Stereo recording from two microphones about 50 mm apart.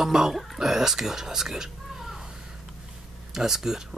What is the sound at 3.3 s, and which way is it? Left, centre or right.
Speech, centre.